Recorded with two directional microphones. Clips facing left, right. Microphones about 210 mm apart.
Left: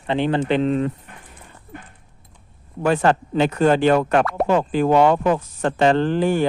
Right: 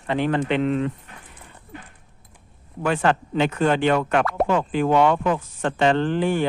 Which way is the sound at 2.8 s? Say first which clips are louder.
Left 3 dB; 40° left (ahead or behind).